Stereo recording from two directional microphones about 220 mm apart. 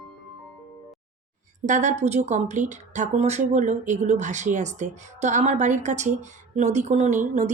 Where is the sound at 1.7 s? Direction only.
35° right (ahead or behind).